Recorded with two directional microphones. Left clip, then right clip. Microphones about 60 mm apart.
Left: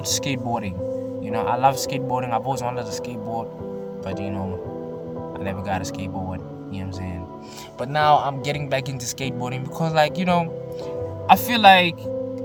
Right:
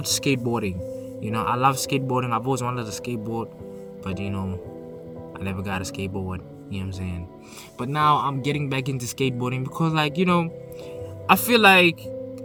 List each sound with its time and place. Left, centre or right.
0.0 s speech: right
7.8 s a man's voice: centre
10.9 s speech: right